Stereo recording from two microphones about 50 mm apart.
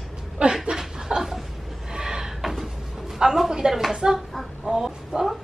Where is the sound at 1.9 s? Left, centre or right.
Centre.